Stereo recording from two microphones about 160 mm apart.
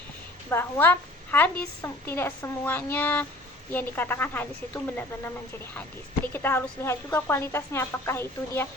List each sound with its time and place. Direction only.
0.5 s a woman's voice: 10° left (ahead or behind)
6.3 s a woman's voice: 15° left (ahead or behind)